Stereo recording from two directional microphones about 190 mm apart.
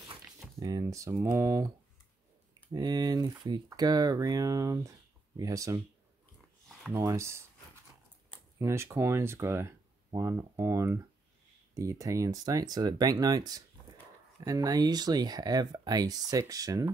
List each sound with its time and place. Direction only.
0.1 s speech: 20° right (ahead or behind)
2.7 s speech: 20° right (ahead or behind)
6.9 s speech: 15° right (ahead or behind)
8.5 s speech: 15° right (ahead or behind)